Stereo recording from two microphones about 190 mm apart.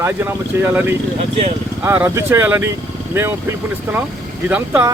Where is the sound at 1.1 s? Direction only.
35° right (ahead or behind).